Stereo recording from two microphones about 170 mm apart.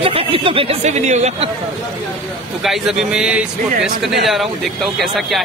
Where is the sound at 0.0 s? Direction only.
35° right (ahead or behind).